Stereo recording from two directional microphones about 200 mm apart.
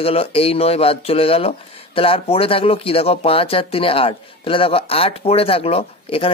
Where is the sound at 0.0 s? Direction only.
30° left (ahead or behind).